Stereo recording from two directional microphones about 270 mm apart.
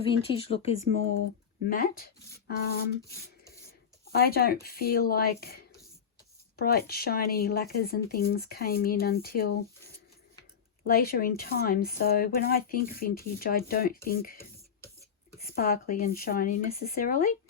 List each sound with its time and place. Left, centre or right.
0.0 s speech: left
3.0 s a sound: centre
4.0 s speech: left
10.8 s speech: left
15.4 s speech: left